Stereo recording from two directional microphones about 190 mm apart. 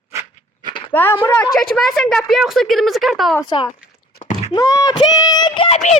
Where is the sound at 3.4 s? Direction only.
25° left (ahead or behind).